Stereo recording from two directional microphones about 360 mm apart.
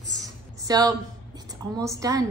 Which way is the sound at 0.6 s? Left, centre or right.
Centre.